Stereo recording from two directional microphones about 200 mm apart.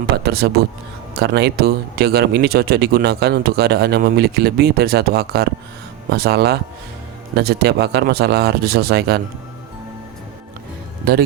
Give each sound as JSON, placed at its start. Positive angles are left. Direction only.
{"t": 0.2, "sound": "speech", "side_deg": -50}